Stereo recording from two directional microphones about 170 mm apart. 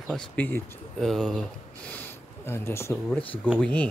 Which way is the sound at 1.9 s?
10° left (ahead or behind).